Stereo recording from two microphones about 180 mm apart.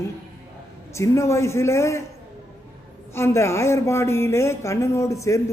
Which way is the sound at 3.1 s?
15° left (ahead or behind).